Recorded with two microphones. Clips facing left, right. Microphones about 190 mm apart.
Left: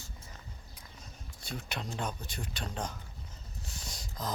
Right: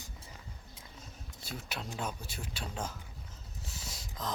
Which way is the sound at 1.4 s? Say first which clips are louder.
Left 2 dB; 5° right (ahead or behind).